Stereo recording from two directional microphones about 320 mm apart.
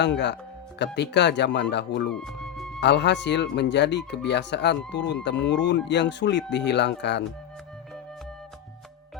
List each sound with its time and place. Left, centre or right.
0.0 s speech: left
2.1 s music: centre
2.8 s speech: left